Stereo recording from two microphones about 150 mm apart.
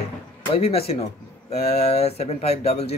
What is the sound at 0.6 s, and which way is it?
Speech, 40° left (ahead or behind).